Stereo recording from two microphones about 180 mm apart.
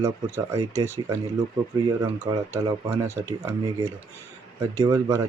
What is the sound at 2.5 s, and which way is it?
Speech, 15° right (ahead or behind).